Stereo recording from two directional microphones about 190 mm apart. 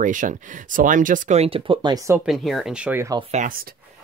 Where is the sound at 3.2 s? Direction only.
40° right (ahead or behind).